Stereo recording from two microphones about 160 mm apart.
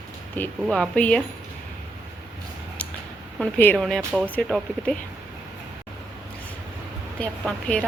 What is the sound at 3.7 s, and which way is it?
Speech, centre (ahead or behind).